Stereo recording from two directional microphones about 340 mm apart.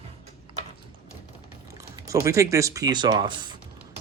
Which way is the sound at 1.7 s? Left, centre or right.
Centre.